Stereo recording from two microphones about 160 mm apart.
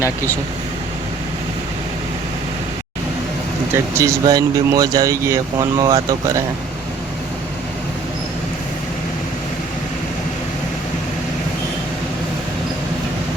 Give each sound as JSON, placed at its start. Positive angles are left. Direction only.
{"t": 3.7, "sound": "speech", "side_deg": -15}